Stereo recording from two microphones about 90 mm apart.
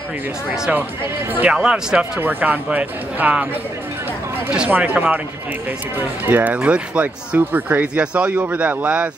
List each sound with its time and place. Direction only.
1.3 s speech: 20° right (ahead or behind)
1.6 s speech: 10° right (ahead or behind)
2.1 s speech: 20° right (ahead or behind)
4.5 s speech: 20° right (ahead or behind)